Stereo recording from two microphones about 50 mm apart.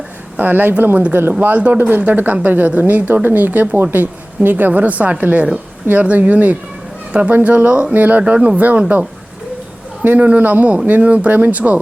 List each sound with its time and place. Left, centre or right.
0.3 s speech: right